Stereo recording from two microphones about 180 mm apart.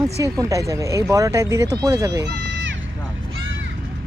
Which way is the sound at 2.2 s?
70° right (ahead or behind).